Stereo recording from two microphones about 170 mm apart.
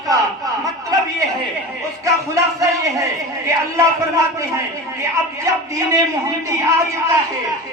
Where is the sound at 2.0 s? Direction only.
20° right (ahead or behind).